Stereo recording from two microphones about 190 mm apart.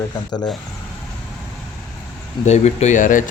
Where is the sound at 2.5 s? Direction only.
35° left (ahead or behind).